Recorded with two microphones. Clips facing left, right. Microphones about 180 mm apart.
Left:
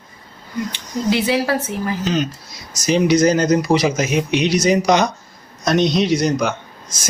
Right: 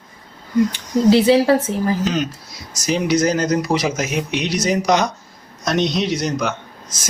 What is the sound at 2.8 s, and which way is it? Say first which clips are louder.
Speech: left 3 dB; centre (ahead or behind).